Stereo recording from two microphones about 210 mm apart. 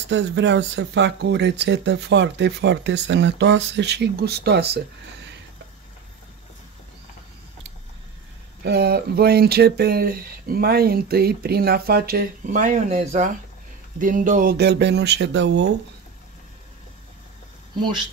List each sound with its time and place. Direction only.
0.1 s speech: 55° right (ahead or behind)
8.6 s speech: 50° right (ahead or behind)